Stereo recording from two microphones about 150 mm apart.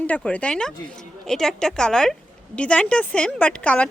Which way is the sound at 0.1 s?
10° left (ahead or behind).